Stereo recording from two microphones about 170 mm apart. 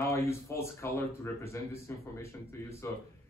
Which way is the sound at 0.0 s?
15° left (ahead or behind).